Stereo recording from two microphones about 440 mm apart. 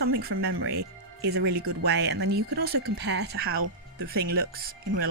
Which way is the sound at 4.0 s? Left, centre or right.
Right.